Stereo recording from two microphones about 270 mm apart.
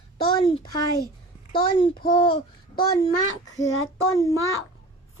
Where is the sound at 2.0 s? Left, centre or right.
Centre.